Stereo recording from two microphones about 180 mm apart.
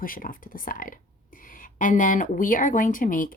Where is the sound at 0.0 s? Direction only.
50° left (ahead or behind).